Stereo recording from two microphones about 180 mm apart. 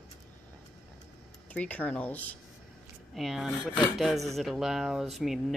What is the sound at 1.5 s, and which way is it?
Speech, 10° left (ahead or behind).